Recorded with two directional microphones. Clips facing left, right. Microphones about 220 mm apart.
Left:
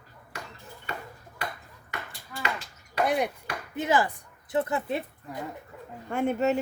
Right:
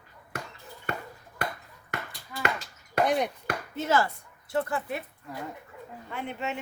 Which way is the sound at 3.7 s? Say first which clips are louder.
Left 1 dB; 15° left (ahead or behind).